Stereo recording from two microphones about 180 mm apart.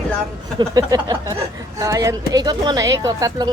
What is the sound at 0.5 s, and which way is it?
Speech, 20° right (ahead or behind).